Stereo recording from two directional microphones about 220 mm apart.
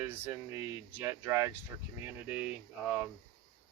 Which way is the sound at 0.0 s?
10° right (ahead or behind).